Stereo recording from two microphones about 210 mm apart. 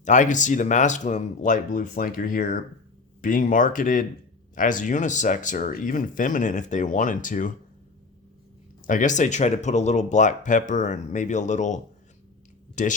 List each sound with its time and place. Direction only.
0.0 s speech: 35° left (ahead or behind)
8.9 s speech: 35° left (ahead or behind)